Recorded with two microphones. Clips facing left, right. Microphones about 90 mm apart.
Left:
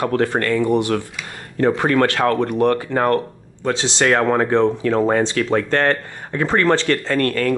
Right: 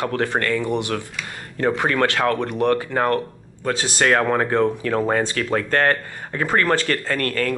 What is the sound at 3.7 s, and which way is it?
Speech, 10° right (ahead or behind).